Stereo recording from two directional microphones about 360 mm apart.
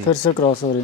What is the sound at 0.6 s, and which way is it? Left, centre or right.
Speech, centre.